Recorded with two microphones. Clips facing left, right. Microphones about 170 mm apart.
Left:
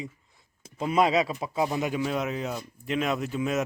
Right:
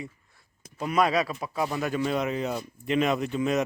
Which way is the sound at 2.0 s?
Centre (ahead or behind).